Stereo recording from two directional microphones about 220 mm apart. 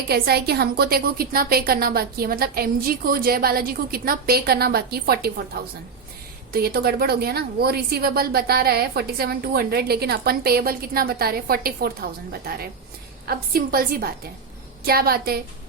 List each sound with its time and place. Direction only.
0.1 s a woman's voice: 45° right (ahead or behind)